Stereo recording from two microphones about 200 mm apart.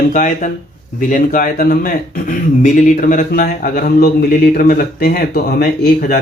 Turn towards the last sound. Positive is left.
turn(degrees=50)  # may be behind; listen again after turning